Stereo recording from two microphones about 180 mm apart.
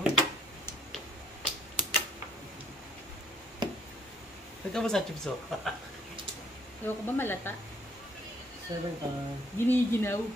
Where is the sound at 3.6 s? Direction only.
25° right (ahead or behind).